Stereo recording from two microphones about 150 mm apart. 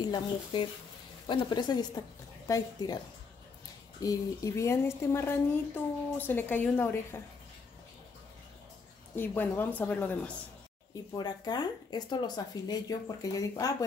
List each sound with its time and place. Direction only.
0.1 s speech: 35° left (ahead or behind)
4.0 s speech: 20° left (ahead or behind)
9.1 s speech: 15° left (ahead or behind)
11.1 s speech: 25° left (ahead or behind)